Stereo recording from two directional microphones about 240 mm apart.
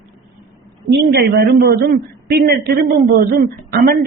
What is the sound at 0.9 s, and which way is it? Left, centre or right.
A woman's voice, right.